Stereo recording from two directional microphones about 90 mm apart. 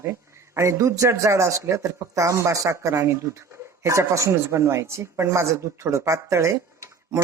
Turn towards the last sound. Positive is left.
turn(degrees=-35)  # may be behind; listen again after turning